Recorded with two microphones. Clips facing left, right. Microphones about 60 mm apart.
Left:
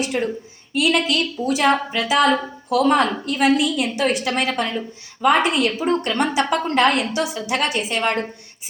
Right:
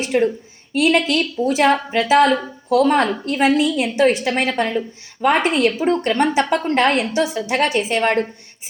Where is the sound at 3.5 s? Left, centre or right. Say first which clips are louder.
Right 3 dB; right.